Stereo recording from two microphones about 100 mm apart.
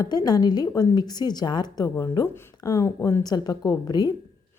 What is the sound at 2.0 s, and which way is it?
A woman's voice, 30° left (ahead or behind).